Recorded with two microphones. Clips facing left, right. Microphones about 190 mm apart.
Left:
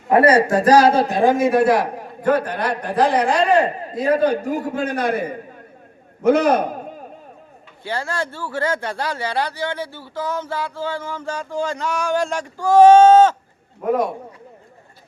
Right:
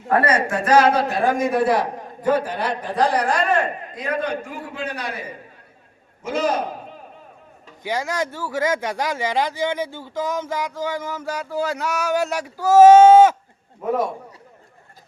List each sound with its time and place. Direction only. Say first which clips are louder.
0.1 s a man's voice: left 6 dB; 30° left (ahead or behind)
1.4 s a man's voice: left 3 dB; centre (ahead or behind)
3.3 s a man's voice: left 4 dB; 30° left (ahead or behind); by 5.3 s 50° left (ahead or behind)
6.2 s a man's voice: left 7 dB; 60° left (ahead or behind)
7.9 s speech: right 1 dB; 15° right (ahead or behind)